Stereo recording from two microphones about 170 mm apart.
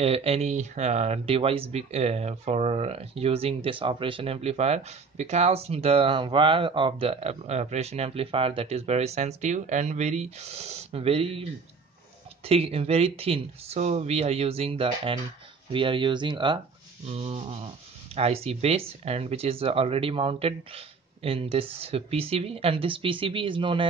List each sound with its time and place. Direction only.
0.0 s speech: 35° right (ahead or behind)
12.4 s speech: 35° right (ahead or behind)